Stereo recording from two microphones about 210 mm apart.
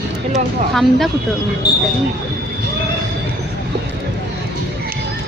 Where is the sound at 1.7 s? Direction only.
50° left (ahead or behind).